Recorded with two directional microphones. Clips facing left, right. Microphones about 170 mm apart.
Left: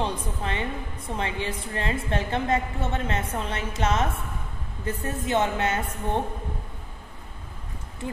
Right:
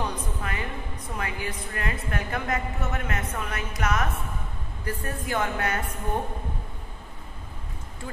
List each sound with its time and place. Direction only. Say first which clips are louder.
0.0 s a woman's voice: left 2 dB; 30° left (ahead or behind)